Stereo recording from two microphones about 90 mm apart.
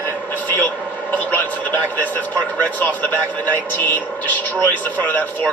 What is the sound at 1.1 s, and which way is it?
A man's voice, 20° left (ahead or behind).